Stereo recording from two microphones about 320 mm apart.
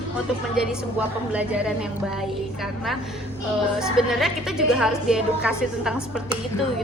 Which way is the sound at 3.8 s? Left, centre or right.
Centre.